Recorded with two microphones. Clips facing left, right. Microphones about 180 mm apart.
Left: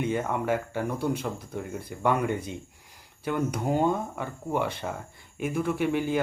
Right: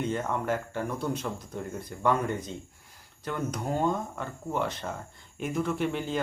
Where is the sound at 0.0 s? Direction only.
10° left (ahead or behind).